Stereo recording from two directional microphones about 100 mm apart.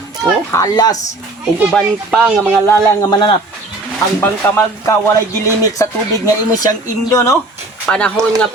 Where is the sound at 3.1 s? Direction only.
50° left (ahead or behind).